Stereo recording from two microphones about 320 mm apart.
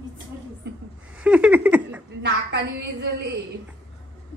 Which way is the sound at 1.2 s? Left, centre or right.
Centre.